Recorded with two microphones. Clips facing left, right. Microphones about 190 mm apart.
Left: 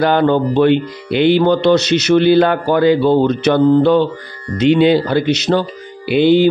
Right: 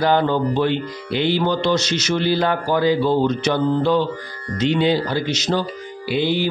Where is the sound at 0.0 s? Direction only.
65° left (ahead or behind).